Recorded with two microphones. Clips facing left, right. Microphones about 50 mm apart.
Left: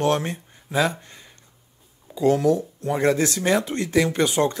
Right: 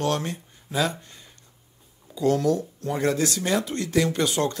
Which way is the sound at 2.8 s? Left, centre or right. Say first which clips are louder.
Left 4 dB; left.